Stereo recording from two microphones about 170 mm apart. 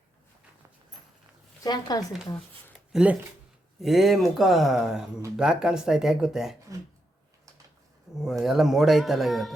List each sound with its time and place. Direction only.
1.6 s speech: 20° left (ahead or behind)
2.9 s speech: 5° right (ahead or behind)
8.2 s speech: centre (ahead or behind)